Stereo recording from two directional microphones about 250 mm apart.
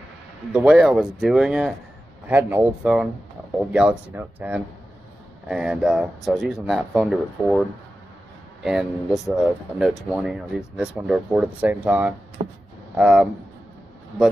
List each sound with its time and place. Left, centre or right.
0.5 s speech: centre
8.6 s speech: centre
12.4 s speech: right
12.9 s speech: centre